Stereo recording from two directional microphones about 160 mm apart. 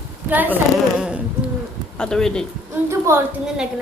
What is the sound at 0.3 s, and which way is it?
A woman's voice, 10° right (ahead or behind).